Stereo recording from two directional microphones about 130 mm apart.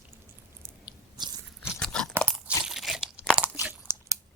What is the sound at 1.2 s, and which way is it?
Biting, 35° right (ahead or behind).